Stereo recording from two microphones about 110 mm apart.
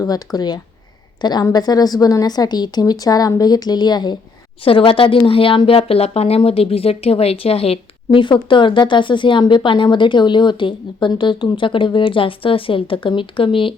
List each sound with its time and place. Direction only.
0.0 s a woman's voice: 35° left (ahead or behind)
4.6 s speech: 55° left (ahead or behind)